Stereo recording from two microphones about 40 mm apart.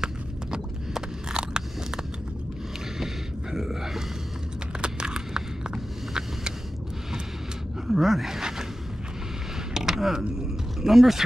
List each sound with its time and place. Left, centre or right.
0.0 s a sound: centre
3.5 s a sound: centre
4.8 s vehicle: right
7.9 s speech: centre
9.8 s mechanisms: centre
10.8 s speech: centre